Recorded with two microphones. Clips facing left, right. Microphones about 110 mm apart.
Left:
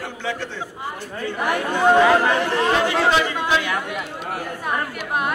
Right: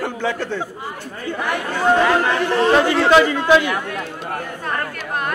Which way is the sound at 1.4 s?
15° left (ahead or behind).